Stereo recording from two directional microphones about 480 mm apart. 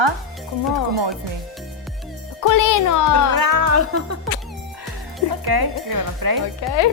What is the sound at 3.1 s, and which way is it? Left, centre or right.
Speech, right.